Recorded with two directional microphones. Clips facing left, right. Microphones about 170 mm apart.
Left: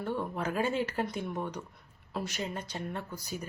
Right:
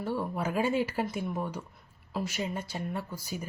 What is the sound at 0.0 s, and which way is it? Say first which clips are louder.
Speech: right 1 dB; 10° right (ahead or behind).